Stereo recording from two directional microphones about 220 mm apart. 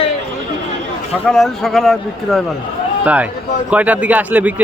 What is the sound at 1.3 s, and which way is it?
A man's voice, centre (ahead or behind).